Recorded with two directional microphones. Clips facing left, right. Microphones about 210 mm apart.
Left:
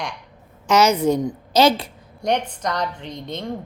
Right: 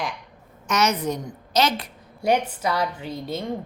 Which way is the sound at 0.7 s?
30° left (ahead or behind).